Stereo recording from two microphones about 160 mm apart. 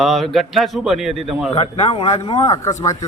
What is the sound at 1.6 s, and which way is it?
Speech, 35° left (ahead or behind).